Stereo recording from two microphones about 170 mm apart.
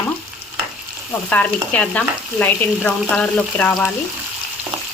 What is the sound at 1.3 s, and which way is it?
Frying, 10° left (ahead or behind).